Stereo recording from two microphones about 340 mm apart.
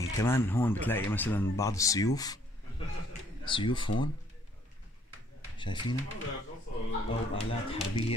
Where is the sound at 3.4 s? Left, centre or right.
Centre.